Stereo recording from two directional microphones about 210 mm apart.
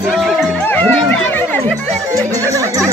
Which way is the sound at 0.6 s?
10° left (ahead or behind).